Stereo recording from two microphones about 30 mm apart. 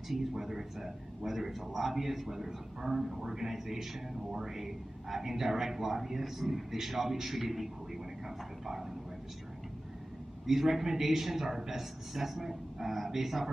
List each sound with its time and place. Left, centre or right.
0.1 s a man's voice: centre
10.4 s a man's voice: centre